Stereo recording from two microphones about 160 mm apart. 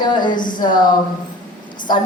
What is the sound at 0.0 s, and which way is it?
Speech, 30° left (ahead or behind).